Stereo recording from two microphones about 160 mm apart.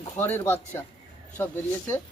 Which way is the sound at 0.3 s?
15° left (ahead or behind).